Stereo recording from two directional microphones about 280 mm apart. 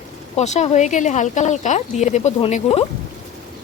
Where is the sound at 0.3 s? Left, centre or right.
Left.